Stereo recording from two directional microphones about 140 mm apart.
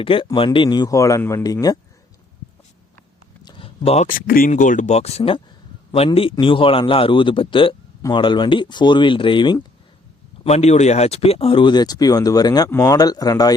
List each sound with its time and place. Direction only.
0.0 s a man's voice: 40° left (ahead or behind)
3.4 s a sound: 40° left (ahead or behind)
4.0 s speech: 85° left; by 5.4 s 45° left (ahead or behind)
6.4 s speech: 40° left (ahead or behind)
10.4 s a man's voice: 50° left (ahead or behind); by 13.5 s 25° left (ahead or behind)